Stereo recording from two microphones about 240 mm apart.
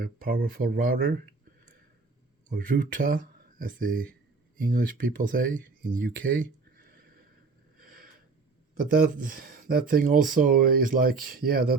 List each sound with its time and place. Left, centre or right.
0.0 s speech: right
2.5 s speech: right
6.0 s a sound: right
9.0 s speech: right